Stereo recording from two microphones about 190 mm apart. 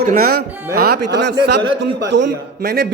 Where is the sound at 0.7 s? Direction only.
55° right (ahead or behind).